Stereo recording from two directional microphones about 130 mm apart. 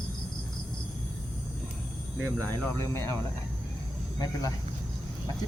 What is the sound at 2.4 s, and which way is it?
Speech, 15° left (ahead or behind).